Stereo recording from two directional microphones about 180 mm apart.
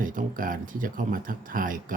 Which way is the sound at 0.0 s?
50° right (ahead or behind).